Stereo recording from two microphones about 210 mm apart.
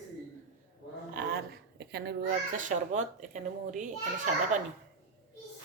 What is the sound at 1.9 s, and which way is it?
Speech, 50° right (ahead or behind).